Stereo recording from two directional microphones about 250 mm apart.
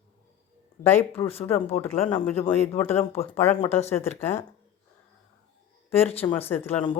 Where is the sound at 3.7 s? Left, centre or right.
Left.